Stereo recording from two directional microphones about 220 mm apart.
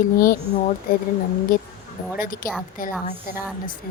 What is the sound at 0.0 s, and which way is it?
Speech, 40° left (ahead or behind).